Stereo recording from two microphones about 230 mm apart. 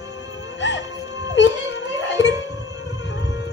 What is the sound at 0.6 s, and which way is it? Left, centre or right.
Music, left.